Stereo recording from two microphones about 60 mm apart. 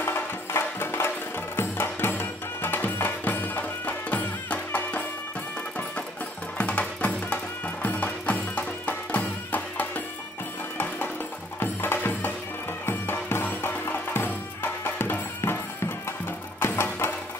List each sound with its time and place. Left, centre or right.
0.0 s music: left
6.6 s music: left
11.6 s music: left